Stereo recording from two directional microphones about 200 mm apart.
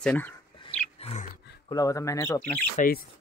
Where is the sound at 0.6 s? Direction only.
30° left (ahead or behind).